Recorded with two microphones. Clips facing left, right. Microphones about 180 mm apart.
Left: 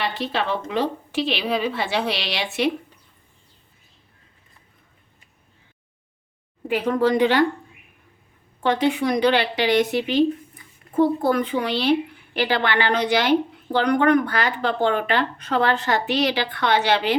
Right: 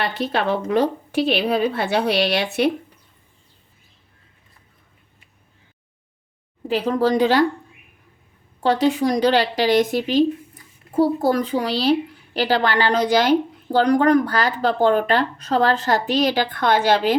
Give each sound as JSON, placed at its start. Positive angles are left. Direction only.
{"t": 0.0, "sound": "a woman's voice", "side_deg": -55}
{"t": 6.7, "sound": "a woman's voice", "side_deg": -30}
{"t": 8.6, "sound": "a woman's voice", "side_deg": -40}